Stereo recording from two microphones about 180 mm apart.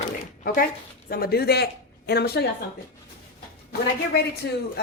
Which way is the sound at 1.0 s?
55° left (ahead or behind).